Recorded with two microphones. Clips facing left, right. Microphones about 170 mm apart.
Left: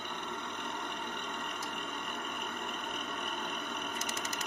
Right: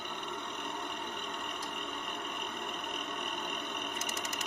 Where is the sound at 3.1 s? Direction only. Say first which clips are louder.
Even; 15° right (ahead or behind).